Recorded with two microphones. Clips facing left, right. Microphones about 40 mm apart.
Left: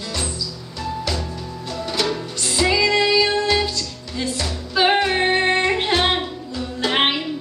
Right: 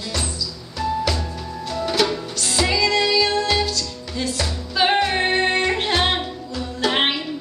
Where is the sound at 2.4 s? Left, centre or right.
Centre.